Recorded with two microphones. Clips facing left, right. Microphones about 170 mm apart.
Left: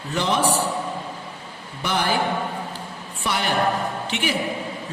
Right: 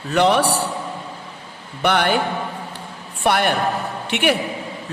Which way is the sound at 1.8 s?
65° right (ahead or behind).